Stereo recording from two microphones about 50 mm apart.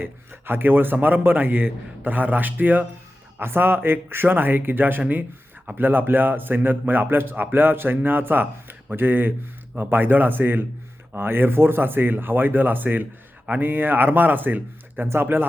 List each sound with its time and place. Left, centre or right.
0.0 s a man's voice: right
3.3 s a man's voice: right
15.0 s a man's voice: right